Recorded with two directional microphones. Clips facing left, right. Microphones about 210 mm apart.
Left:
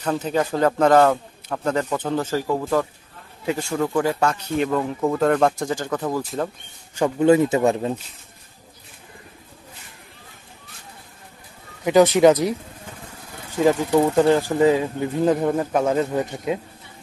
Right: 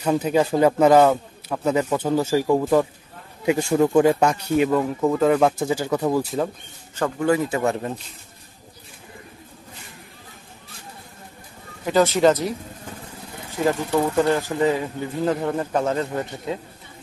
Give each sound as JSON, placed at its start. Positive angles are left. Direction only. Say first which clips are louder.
{"t": 0.0, "sound": "speech", "louder": "right 3 dB", "side_deg": -10}
{"t": 7.0, "sound": "speech", "louder": "left 5 dB", "side_deg": 20}
{"t": 11.8, "sound": "a man's voice", "louder": "left 3 dB", "side_deg": 15}
{"t": 13.7, "sound": "a man's voice", "louder": "left 4 dB", "side_deg": 15}